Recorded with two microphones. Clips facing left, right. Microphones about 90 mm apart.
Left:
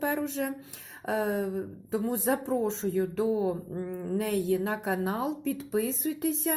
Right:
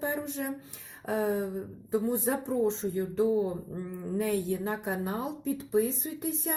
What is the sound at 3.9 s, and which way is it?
Speech, 75° left (ahead or behind).